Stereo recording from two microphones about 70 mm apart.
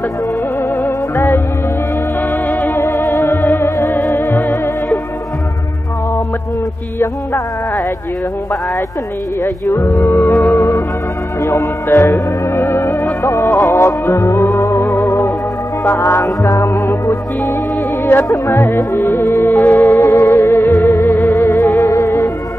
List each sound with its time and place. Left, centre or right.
0.8 s music: left
2.4 s music: left
9.4 s speech: left
11.4 s music: left
18.5 s speech: left
18.9 s music: left